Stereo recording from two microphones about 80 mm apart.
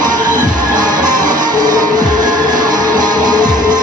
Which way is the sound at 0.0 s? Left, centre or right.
Right.